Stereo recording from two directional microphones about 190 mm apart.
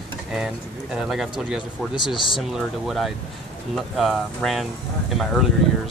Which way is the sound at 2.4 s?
Centre (ahead or behind).